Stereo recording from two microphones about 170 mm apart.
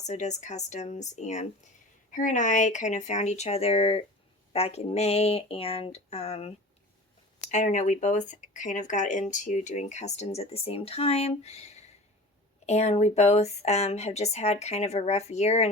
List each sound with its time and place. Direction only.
0.0 s speech: 40° left (ahead or behind)
7.5 s speech: 45° left (ahead or behind)